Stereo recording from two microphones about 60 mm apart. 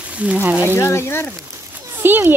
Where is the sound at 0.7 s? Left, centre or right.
Left.